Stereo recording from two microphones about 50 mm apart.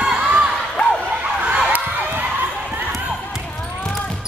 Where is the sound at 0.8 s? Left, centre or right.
Left.